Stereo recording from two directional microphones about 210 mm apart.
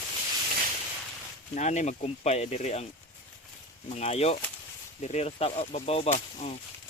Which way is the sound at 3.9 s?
30° left (ahead or behind).